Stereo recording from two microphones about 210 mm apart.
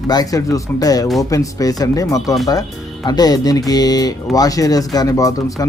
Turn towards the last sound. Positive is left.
turn(degrees=15)  # may be behind; listen again after turning